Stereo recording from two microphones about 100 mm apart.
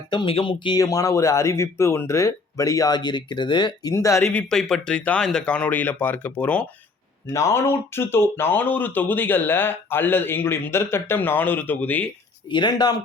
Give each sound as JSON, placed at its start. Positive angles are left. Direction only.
{"t": 0.1, "sound": "speech", "side_deg": 50}
{"t": 0.8, "sound": "speech", "side_deg": 35}
{"t": 3.9, "sound": "speech", "side_deg": 30}
{"t": 4.3, "sound": "speech", "side_deg": 10}
{"t": 7.3, "sound": "speech", "side_deg": 25}
{"t": 12.5, "sound": "speech", "side_deg": 50}